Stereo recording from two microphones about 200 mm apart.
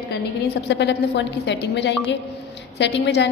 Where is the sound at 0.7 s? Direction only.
60° left (ahead or behind).